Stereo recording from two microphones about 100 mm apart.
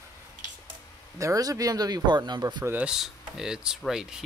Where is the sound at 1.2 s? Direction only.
35° right (ahead or behind).